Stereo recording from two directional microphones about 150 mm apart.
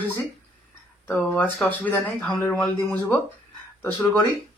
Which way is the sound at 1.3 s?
10° left (ahead or behind).